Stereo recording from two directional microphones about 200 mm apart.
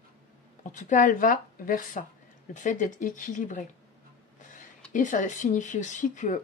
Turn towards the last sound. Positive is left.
turn(degrees=40)  # may be behind; listen again after turning